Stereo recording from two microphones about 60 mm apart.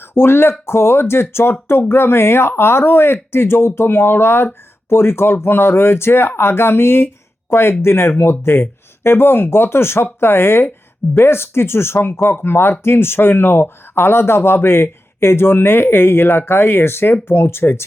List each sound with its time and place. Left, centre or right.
0.1 s speech: left